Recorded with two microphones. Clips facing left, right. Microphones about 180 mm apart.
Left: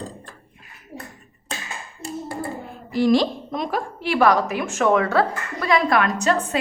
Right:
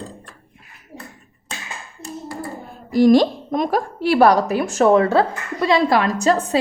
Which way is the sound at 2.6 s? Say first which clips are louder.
Right 6 dB; 40° right (ahead or behind).